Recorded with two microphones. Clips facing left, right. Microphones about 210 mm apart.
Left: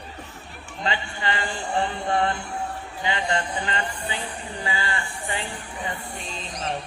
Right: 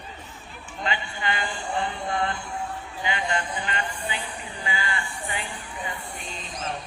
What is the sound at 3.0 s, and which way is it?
A man's voice, 30° left (ahead or behind).